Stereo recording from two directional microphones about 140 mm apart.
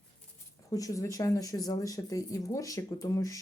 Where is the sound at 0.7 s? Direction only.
25° left (ahead or behind).